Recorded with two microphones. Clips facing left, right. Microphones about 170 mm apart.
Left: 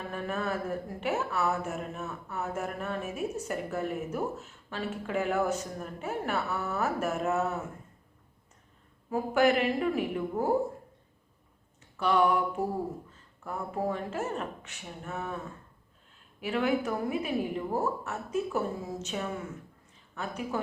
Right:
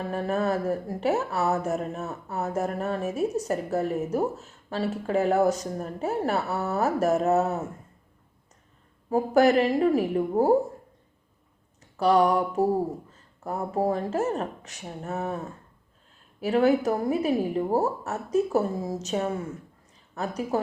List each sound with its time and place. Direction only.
0.0 s speech: 40° right (ahead or behind)
9.0 s speech: 40° right (ahead or behind)
11.9 s speech: 40° right (ahead or behind)
16.4 s speech: 40° right (ahead or behind)